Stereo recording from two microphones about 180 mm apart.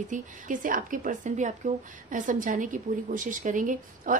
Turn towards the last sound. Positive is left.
turn(degrees=-45)  # may be behind; listen again after turning